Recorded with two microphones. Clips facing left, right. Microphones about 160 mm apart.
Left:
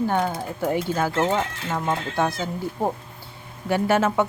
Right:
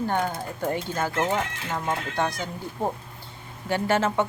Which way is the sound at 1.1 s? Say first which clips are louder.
Left 3 dB; 30° left (ahead or behind).